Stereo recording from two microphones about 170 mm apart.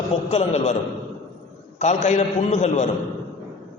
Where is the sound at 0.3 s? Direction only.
40° left (ahead or behind).